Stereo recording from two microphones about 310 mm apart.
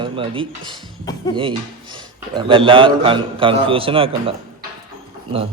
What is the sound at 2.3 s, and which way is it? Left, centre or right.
A man's voice, centre.